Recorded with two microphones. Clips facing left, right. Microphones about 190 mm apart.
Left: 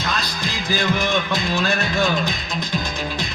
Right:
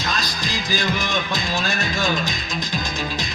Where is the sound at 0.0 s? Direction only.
60° left (ahead or behind).